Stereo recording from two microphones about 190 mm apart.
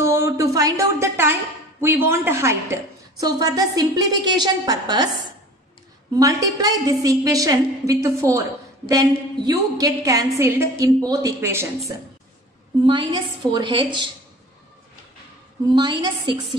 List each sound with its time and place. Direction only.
0.0 s a sound: 15° right (ahead or behind)
1.8 s a woman's voice: 10° right (ahead or behind)
6.1 s a woman's voice: 20° right (ahead or behind)
12.8 s a woman's voice: 25° right (ahead or behind)
15.7 s a woman's voice: 25° right (ahead or behind)